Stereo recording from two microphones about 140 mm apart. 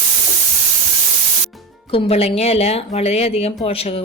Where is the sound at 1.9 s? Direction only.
45° left (ahead or behind).